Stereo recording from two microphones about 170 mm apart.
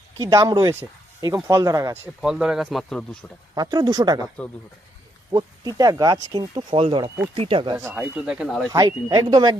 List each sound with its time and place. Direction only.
0.2 s speech: 20° right (ahead or behind)
2.2 s speech: 5° right (ahead or behind)
3.5 s speech: 25° right (ahead or behind)
5.3 s speech: 20° right (ahead or behind)
7.8 s speech: 15° right (ahead or behind)
8.7 s speech: 20° right (ahead or behind)